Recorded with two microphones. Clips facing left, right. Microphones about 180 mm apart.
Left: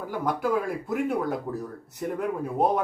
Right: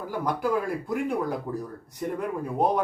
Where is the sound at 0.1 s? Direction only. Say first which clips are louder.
Even; centre (ahead or behind).